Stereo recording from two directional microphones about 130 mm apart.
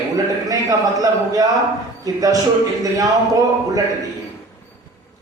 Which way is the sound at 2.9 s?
25° right (ahead or behind).